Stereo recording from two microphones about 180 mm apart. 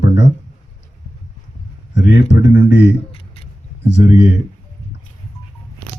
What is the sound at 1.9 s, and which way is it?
Speech, 80° left.